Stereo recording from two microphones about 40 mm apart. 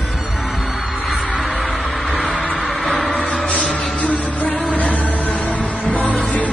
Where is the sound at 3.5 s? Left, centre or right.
Left.